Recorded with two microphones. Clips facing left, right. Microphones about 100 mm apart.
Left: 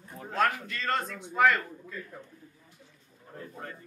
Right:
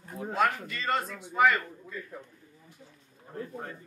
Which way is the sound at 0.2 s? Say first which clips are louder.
Right 1 dB; 5° right (ahead or behind).